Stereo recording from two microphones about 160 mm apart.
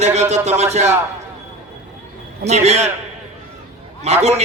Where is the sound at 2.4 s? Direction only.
45° right (ahead or behind).